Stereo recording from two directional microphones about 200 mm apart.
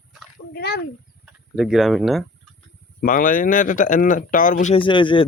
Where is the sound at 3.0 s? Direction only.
45° left (ahead or behind).